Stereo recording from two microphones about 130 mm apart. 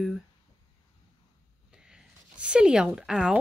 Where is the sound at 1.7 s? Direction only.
5° right (ahead or behind).